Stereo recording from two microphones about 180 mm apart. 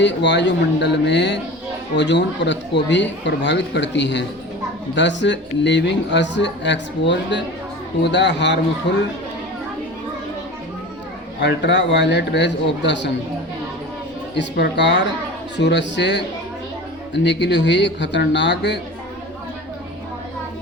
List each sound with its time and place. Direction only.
0.0 s a woman's voice: 75° left (ahead or behind)
11.3 s a woman's voice: 75° left (ahead or behind)
14.3 s a woman's voice: 75° left (ahead or behind)
17.2 s a woman's voice: 80° left